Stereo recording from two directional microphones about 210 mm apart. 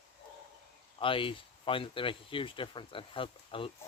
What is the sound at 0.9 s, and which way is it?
Speech, 25° left (ahead or behind).